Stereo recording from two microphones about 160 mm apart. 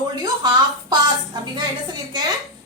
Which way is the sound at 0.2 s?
25° right (ahead or behind).